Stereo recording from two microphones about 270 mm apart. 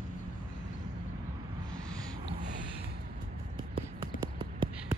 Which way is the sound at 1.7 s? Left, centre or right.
Centre.